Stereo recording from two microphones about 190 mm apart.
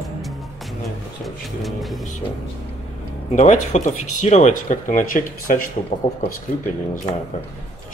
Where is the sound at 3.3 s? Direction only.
40° left (ahead or behind).